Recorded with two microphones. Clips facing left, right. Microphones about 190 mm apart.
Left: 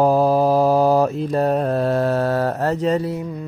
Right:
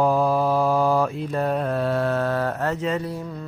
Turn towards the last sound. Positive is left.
turn(degrees=40)  # may be behind; listen again after turning